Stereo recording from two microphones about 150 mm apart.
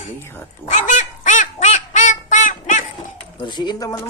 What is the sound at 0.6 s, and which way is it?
Duck, 50° left (ahead or behind).